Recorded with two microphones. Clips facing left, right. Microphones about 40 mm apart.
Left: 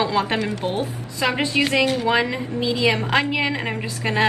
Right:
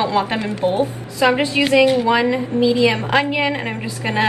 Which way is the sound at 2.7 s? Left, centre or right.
Right.